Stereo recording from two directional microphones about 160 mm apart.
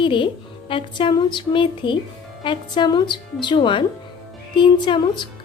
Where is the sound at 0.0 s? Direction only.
30° left (ahead or behind).